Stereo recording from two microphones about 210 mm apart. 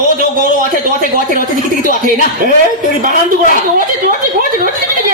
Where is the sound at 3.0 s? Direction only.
40° right (ahead or behind).